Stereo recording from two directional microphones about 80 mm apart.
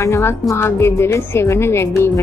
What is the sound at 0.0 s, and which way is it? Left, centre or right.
A woman's voice, left.